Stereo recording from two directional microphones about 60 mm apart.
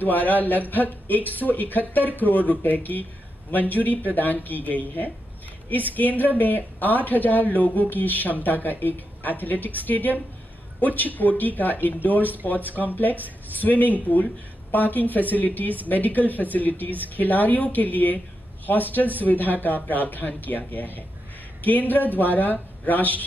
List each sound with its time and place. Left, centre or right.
0.0 s speech: left